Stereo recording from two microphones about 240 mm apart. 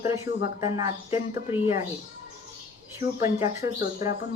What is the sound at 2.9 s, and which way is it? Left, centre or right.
A woman's voice, centre.